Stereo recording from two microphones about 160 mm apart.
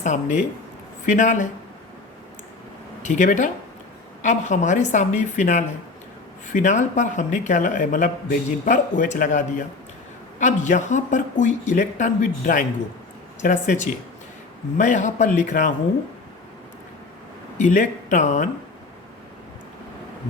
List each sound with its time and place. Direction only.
0.0 s speech: 50° left (ahead or behind)
3.0 s speech: 50° left (ahead or behind)
17.6 s speech: 50° left (ahead or behind)